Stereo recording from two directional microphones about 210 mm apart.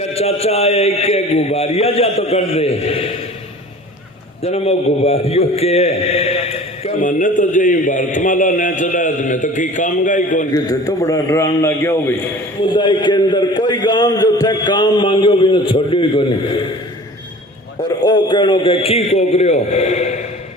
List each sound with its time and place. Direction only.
0.1 s a man's voice: 30° left (ahead or behind)
4.4 s a man's voice: 30° left (ahead or behind)
10.5 s a man's voice: 15° left (ahead or behind)
12.6 s a man's voice: 20° left (ahead or behind)
18.0 s a man's voice: 20° left (ahead or behind)